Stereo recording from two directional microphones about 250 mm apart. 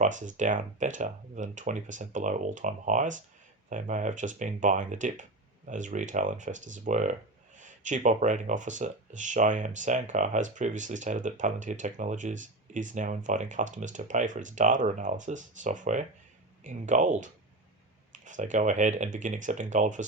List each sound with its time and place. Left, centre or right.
0.0 s speech: right